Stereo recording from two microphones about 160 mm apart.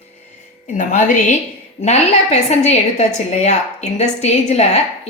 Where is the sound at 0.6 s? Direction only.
50° left (ahead or behind).